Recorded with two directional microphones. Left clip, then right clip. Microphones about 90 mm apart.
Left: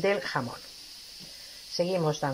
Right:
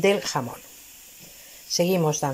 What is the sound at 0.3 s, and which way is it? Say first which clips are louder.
Speech: right 3 dB; 15° right (ahead or behind).